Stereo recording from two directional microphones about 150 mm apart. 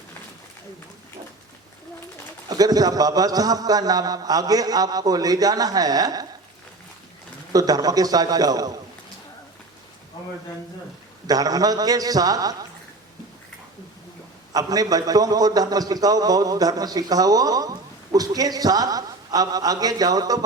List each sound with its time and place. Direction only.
2.5 s a man's voice: 25° right (ahead or behind)
7.5 s a man's voice: 25° right (ahead or behind)
11.3 s a man's voice: 25° right (ahead or behind)
14.5 s a man's voice: 25° right (ahead or behind)